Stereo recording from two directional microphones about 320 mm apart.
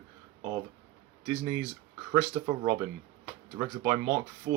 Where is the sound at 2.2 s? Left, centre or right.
Centre.